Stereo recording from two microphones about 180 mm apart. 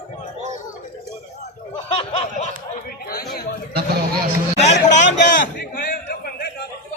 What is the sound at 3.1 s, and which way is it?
Chatter, 55° left (ahead or behind).